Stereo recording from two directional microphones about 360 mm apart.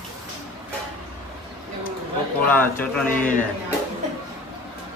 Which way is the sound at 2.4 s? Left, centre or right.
Centre.